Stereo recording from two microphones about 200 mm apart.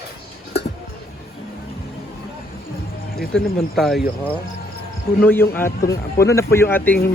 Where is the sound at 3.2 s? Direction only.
Centre (ahead or behind).